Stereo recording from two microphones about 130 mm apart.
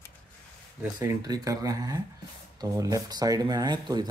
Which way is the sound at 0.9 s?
30° right (ahead or behind).